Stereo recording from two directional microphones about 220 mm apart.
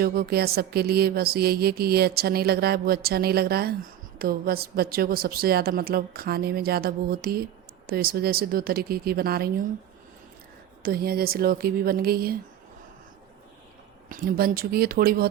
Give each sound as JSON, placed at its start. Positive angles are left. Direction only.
{"t": 0.0, "sound": "music", "side_deg": -45}
{"t": 10.8, "sound": "music", "side_deg": -45}
{"t": 14.1, "sound": "music", "side_deg": -40}